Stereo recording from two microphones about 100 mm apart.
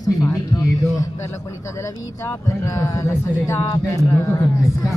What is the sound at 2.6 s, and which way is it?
Speech, 35° left (ahead or behind).